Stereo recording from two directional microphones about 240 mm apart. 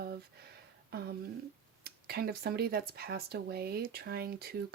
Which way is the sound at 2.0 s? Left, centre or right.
Right.